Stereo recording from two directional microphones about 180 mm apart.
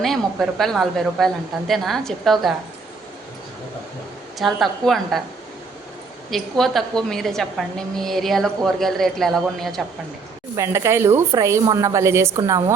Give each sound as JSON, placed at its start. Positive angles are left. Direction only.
{"t": 0.0, "sound": "a woman's voice", "side_deg": 0}
{"t": 4.4, "sound": "a woman's voice", "side_deg": 0}
{"t": 6.3, "sound": "a woman's voice", "side_deg": 0}
{"t": 10.5, "sound": "a woman's voice", "side_deg": -15}